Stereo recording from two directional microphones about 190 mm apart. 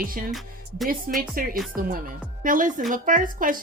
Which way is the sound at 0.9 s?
50° right (ahead or behind).